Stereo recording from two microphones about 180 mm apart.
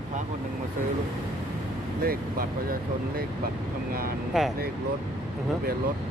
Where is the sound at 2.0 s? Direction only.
55° right (ahead or behind).